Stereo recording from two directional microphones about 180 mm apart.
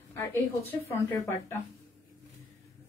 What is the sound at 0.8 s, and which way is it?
Speech, 15° left (ahead or behind).